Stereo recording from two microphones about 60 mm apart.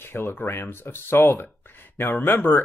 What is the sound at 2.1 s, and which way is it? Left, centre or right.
Speech, left.